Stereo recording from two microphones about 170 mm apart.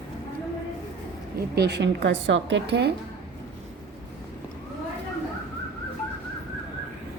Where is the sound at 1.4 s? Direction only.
70° right (ahead or behind).